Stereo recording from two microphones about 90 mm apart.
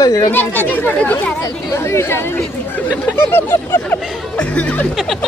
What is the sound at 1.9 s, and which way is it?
Speech, 30° left (ahead or behind).